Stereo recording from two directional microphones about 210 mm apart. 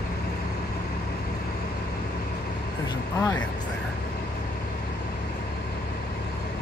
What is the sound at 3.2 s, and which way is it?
Speech, 15° left (ahead or behind).